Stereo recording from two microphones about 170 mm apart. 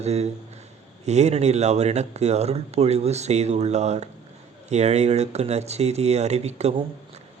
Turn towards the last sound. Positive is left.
turn(degrees=-40)  # may be behind; listen again after turning